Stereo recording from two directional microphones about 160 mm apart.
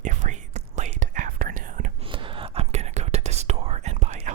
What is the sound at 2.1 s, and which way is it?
Whispering, 35° right (ahead or behind).